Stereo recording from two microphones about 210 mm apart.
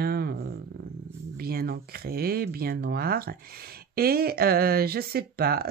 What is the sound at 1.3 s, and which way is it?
Speech, 45° right (ahead or behind).